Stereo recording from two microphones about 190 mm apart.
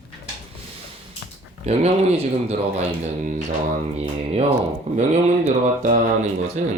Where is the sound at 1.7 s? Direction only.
35° right (ahead or behind).